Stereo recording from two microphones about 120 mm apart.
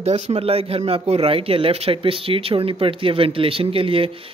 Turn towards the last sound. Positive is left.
turn(degrees=-50)  # may be behind; listen again after turning